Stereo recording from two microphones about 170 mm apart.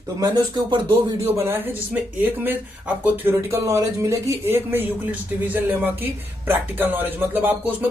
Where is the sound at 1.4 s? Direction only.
15° right (ahead or behind).